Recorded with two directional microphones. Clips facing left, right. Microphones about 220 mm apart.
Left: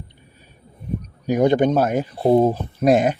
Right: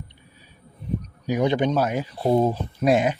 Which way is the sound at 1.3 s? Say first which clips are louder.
Left 5 dB; 50° left (ahead or behind).